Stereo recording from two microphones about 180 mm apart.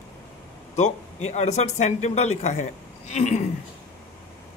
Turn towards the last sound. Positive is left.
turn(degrees=40)  # may be behind; listen again after turning